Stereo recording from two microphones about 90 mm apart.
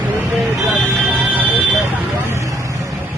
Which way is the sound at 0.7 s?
Centre (ahead or behind).